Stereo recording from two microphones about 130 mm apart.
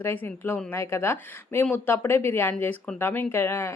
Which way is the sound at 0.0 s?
15° left (ahead or behind).